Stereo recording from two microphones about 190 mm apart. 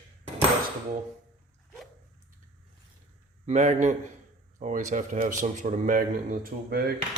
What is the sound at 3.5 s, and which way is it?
Speech, 40° right (ahead or behind).